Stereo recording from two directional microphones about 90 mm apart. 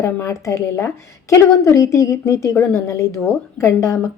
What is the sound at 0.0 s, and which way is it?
A woman's voice, 35° left (ahead or behind).